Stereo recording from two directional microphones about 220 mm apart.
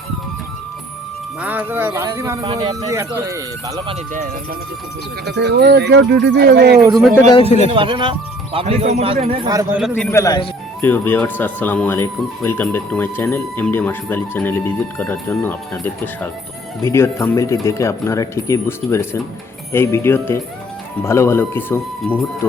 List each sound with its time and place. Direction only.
1.4 s speech: 10° right (ahead or behind)
5.2 s speech: 50° right (ahead or behind)
7.3 s a man's voice: 25° left (ahead or behind)
7.7 s a man's voice: 25° right (ahead or behind)
9.5 s speech: 15° right (ahead or behind)
9.9 s speech: 10° left (ahead or behind)
16.8 s speech: 10° left (ahead or behind)